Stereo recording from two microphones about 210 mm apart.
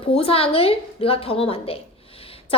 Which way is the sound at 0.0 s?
25° left (ahead or behind).